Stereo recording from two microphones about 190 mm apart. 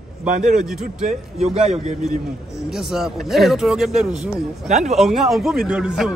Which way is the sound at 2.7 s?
Centre (ahead or behind).